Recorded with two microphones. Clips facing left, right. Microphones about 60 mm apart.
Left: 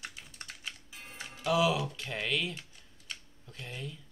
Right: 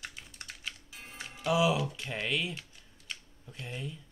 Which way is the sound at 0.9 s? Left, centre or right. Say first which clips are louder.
Even; centre.